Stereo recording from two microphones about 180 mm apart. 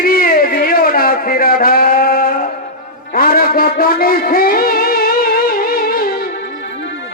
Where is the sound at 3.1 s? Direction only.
55° left (ahead or behind).